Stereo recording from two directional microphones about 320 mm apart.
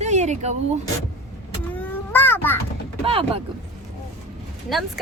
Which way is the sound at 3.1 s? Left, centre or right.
Centre.